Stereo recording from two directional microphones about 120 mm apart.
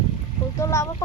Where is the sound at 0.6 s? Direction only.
25° left (ahead or behind).